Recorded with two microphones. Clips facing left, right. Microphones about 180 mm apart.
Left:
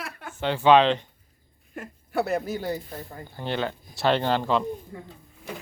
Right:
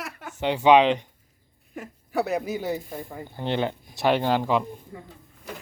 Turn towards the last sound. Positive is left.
turn(degrees=-10)  # may be behind; listen again after turning